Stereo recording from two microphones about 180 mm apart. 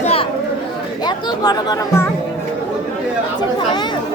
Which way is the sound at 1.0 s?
20° left (ahead or behind).